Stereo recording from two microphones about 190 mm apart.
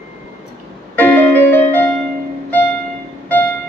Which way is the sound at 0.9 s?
10° left (ahead or behind).